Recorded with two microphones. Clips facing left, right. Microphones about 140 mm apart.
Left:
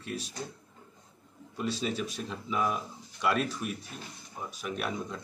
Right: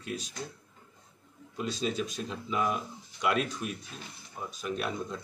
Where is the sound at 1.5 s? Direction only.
5° left (ahead or behind).